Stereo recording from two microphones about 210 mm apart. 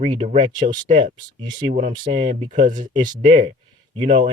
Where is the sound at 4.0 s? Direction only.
25° right (ahead or behind).